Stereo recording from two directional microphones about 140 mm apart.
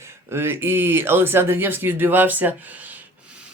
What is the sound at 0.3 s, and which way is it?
Speech, 15° right (ahead or behind).